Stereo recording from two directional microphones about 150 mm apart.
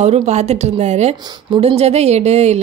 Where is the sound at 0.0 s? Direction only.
45° right (ahead or behind).